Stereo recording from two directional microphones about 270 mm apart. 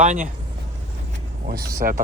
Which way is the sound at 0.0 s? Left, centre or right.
Right.